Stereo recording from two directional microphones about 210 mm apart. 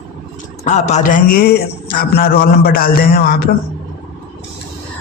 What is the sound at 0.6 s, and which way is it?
A man's voice, 35° left (ahead or behind).